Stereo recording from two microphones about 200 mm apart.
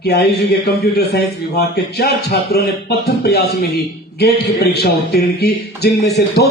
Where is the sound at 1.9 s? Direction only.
55° left (ahead or behind).